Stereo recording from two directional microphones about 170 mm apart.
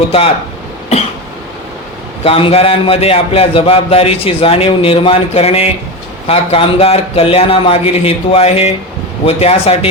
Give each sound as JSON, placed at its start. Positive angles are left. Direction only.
{"t": 2.2, "sound": "a man's voice", "side_deg": 35}